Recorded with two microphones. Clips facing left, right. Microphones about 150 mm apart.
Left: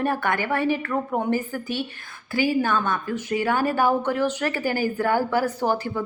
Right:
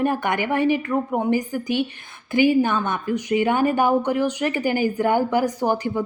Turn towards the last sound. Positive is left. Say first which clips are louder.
# right 2 dB
turn(degrees=-15)  # may be behind; listen again after turning